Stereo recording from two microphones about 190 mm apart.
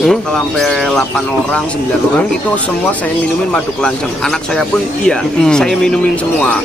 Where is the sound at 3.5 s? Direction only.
5° left (ahead or behind).